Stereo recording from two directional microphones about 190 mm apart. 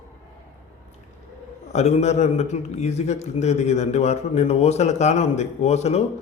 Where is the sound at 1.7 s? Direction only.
35° left (ahead or behind).